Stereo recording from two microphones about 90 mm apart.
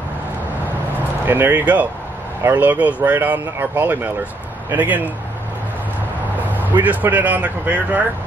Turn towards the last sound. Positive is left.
turn(degrees=-15)  # may be behind; listen again after turning